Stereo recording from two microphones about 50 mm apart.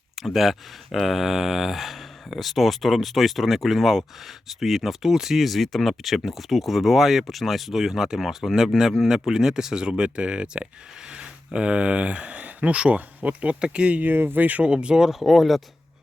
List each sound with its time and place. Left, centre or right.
0.3 s speech: centre; by 14.0 s right
14.0 s speech: right
14.7 s speech: centre
15.2 s speech: centre